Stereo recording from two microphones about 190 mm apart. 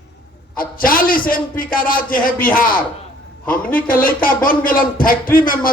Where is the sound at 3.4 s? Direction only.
10° left (ahead or behind).